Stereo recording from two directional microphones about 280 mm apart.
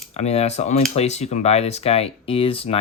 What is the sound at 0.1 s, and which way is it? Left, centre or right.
Speech, left.